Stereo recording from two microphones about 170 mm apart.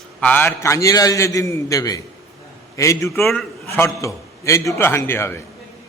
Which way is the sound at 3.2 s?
Centre (ahead or behind).